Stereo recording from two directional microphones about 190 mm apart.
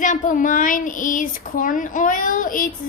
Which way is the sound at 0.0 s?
40° left (ahead or behind).